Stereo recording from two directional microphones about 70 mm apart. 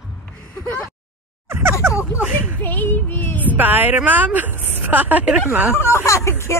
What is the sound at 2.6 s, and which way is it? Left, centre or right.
Child singing, left.